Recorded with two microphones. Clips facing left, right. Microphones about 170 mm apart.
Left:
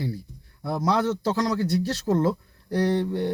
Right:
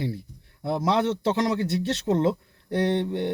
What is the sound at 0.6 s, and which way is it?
A man's voice, 25° right (ahead or behind).